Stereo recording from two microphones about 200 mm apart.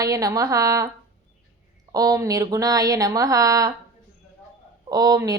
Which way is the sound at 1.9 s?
20° right (ahead or behind).